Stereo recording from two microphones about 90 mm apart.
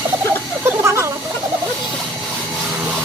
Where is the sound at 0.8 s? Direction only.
30° right (ahead or behind).